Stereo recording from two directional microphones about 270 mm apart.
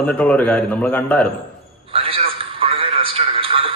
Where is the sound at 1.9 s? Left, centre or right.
Right.